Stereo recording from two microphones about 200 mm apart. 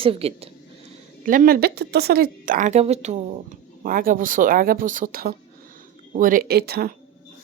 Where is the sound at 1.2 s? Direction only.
45° right (ahead or behind).